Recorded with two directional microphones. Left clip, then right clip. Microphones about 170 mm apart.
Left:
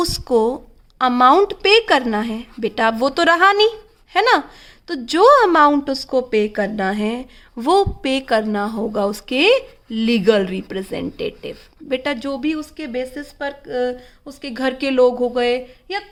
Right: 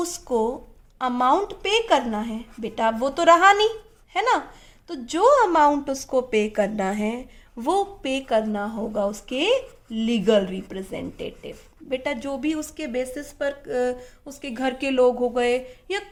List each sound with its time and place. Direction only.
0.0 s a woman's voice: 45° left (ahead or behind)
12.5 s speech: 5° left (ahead or behind)
14.3 s a woman's voice: 25° left (ahead or behind)